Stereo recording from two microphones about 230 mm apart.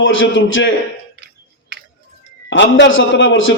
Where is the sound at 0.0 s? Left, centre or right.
Left.